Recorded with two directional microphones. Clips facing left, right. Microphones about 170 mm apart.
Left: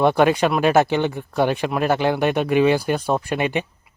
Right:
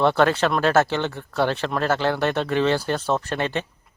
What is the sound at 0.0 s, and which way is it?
Speech, 15° left (ahead or behind).